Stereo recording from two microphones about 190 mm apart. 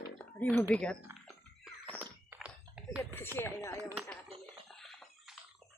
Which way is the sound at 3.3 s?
15° left (ahead or behind).